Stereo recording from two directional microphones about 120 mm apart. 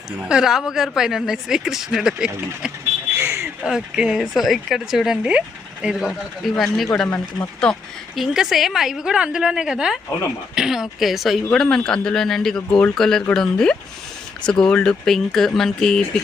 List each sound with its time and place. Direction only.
0.2 s a woman's voice: 5° right (ahead or behind)
3.2 s a sound: 20° right (ahead or behind)
3.6 s a woman's voice: 5° right (ahead or behind)